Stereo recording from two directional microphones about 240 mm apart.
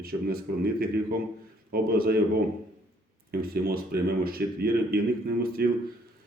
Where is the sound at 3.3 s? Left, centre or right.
Right.